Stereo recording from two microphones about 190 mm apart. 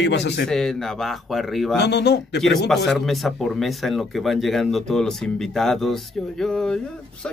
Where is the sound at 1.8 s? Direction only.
60° left (ahead or behind).